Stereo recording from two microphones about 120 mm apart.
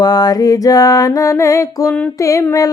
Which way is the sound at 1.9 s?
15° left (ahead or behind).